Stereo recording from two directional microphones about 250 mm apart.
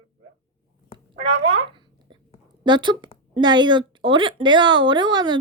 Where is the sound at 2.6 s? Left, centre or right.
Centre.